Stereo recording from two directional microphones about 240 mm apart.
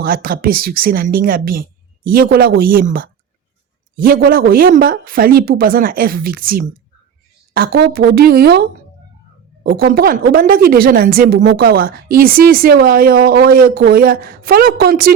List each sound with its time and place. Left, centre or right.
0.0 s a woman's voice: right
9.6 s a woman's voice: right